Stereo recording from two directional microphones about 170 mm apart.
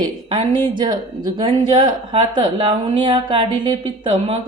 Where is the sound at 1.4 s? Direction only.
30° right (ahead or behind).